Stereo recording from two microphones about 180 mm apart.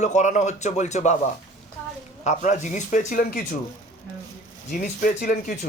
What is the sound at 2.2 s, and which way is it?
Speech, 40° left (ahead or behind).